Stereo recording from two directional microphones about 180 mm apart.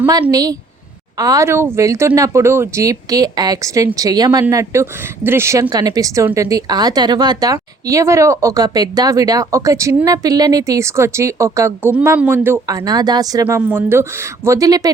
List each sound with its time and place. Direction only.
0.1 s speech: 20° right (ahead or behind)